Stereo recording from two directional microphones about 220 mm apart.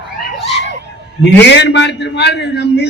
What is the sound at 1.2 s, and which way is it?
A man's voice, 50° left (ahead or behind).